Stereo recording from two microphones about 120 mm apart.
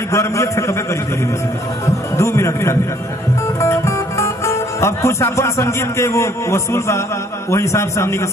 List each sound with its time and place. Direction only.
0.1 s a man's voice: 25° left (ahead or behind)
2.1 s music: 25° left (ahead or behind)
3.6 s a man's voice: 25° left (ahead or behind)